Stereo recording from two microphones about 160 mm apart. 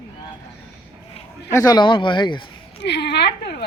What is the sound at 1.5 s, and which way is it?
Speech, 20° left (ahead or behind).